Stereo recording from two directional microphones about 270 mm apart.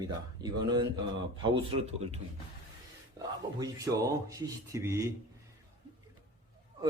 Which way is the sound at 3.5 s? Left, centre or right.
Centre.